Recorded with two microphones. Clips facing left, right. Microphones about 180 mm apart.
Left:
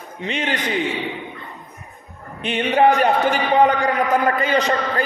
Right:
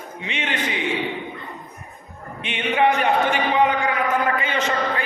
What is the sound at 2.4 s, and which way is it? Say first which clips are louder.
A man's voice: left 4 dB; 40° left (ahead or behind).